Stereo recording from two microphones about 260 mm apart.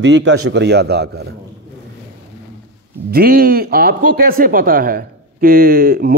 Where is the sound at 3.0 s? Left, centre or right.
Right.